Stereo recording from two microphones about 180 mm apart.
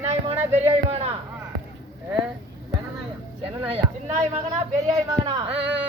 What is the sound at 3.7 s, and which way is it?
Speech, 35° right (ahead or behind).